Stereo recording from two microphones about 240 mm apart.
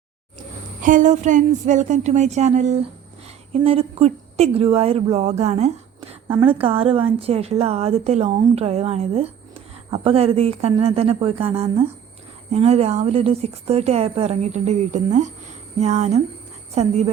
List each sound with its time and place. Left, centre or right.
0.3 s a woman's voice: right